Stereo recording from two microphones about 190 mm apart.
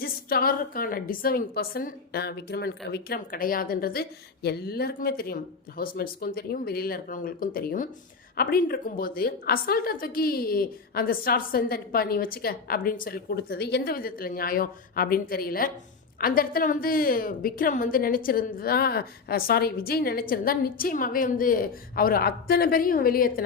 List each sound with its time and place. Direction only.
0.0 s a woman's voice: 50° left (ahead or behind)